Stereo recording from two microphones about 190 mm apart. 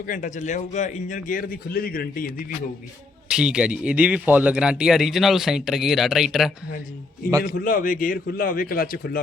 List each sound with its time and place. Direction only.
0.0 s a man's voice: 45° left (ahead or behind)
3.2 s a man's voice: 5° right (ahead or behind)
7.4 s a man's voice: 45° left (ahead or behind)